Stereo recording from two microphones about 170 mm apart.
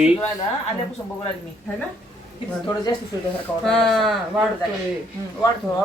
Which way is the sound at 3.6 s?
Centre (ahead or behind).